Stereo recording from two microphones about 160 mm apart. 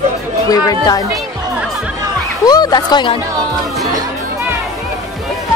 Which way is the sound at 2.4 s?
25° left (ahead or behind).